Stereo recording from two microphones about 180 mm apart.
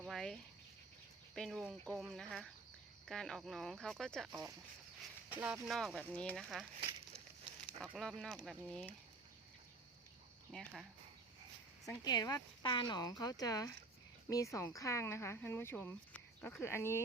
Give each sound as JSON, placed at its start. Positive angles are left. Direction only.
{"t": 0.0, "sound": "cricket", "side_deg": 0}
{"t": 1.4, "sound": "speech", "side_deg": 0}
{"t": 7.8, "sound": "speech", "side_deg": 0}
{"t": 10.5, "sound": "speech", "side_deg": 5}
{"t": 11.9, "sound": "speech", "side_deg": 20}